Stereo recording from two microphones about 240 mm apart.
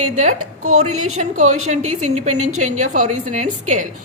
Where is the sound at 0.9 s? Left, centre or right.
Right.